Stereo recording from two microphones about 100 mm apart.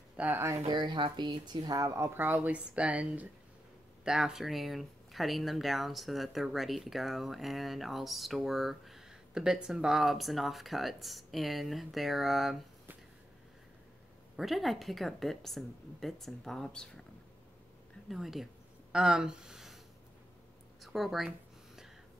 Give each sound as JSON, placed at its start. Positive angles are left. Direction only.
{"t": 0.1, "sound": "a sound", "side_deg": -15}
{"t": 0.7, "sound": "speech", "side_deg": -50}
{"t": 14.3, "sound": "speech", "side_deg": 0}
{"t": 18.1, "sound": "speech", "side_deg": 0}
{"t": 20.8, "sound": "speech", "side_deg": 0}